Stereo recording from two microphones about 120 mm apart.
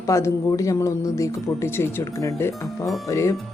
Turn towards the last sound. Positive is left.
turn(degrees=25)  # may be behind; listen again after turning